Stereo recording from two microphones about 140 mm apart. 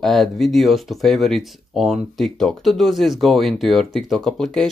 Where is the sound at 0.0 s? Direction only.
Centre (ahead or behind).